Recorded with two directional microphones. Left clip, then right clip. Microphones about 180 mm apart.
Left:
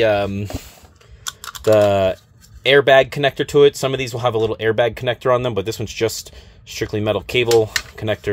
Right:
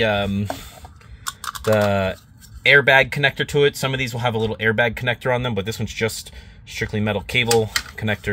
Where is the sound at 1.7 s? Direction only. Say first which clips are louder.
Left 5 dB; 30° left (ahead or behind).